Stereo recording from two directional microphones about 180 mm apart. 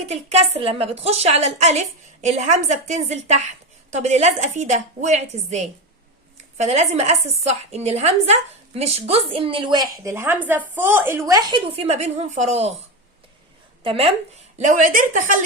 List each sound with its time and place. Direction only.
0.1 s a woman's voice: 35° right (ahead or behind)
13.8 s a woman's voice: 30° right (ahead or behind)
14.6 s speech: 45° right (ahead or behind)